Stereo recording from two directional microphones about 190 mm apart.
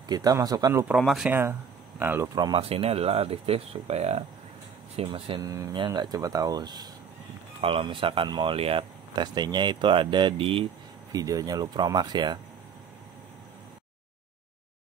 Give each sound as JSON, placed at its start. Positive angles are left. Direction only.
{"t": 0.1, "sound": "speech", "side_deg": -20}
{"t": 0.9, "sound": "speech", "side_deg": -5}